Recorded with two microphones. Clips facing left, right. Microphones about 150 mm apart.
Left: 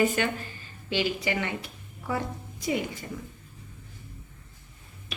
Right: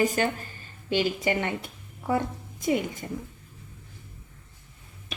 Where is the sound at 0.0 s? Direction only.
40° right (ahead or behind).